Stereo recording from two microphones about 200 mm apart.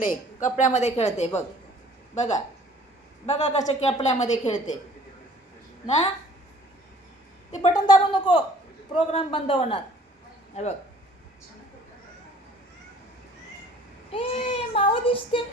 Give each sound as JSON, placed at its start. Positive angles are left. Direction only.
{"t": 0.0, "sound": "a woman's voice", "side_deg": 40}
{"t": 7.7, "sound": "speech", "side_deg": 25}
{"t": 14.1, "sound": "speech", "side_deg": 30}